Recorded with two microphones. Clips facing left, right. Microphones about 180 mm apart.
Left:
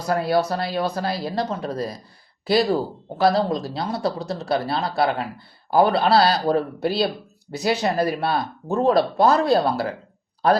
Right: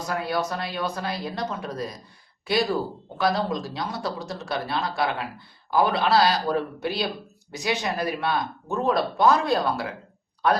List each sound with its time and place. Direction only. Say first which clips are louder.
0.1 s speech: left 7 dB; 35° left (ahead or behind)